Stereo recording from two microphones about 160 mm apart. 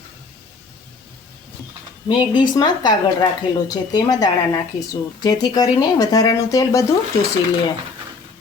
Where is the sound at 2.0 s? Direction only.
30° left (ahead or behind).